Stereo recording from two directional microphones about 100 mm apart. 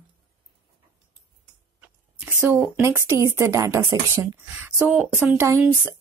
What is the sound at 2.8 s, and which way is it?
Speech, 25° right (ahead or behind).